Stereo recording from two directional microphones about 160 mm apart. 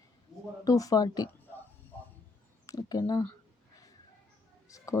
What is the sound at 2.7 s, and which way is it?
Speech, 25° left (ahead or behind).